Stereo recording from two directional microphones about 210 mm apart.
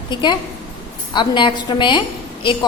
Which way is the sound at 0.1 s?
20° left (ahead or behind).